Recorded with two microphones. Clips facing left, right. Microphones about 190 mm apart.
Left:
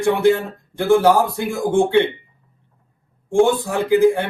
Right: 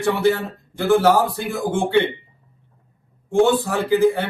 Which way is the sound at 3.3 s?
15° left (ahead or behind).